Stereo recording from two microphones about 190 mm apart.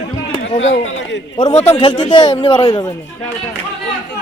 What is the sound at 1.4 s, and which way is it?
A man's voice, 35° left (ahead or behind).